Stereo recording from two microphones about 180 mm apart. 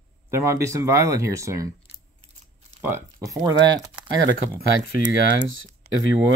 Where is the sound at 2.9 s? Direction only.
15° right (ahead or behind).